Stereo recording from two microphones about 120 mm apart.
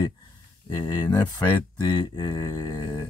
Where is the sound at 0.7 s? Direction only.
30° left (ahead or behind).